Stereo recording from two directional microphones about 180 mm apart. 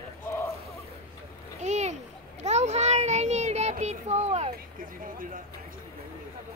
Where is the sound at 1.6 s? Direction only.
40° right (ahead or behind).